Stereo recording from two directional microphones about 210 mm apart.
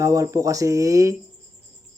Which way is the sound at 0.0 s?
15° right (ahead or behind).